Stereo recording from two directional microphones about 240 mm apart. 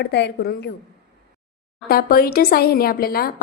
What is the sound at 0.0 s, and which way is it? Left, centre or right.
Speech, left.